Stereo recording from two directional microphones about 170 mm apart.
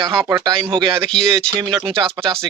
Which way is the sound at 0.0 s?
15° right (ahead or behind).